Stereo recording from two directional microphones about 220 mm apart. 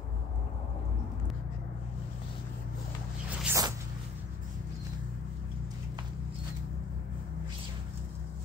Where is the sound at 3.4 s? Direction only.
15° right (ahead or behind).